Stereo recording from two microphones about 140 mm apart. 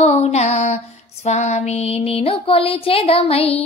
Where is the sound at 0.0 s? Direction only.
50° left (ahead or behind).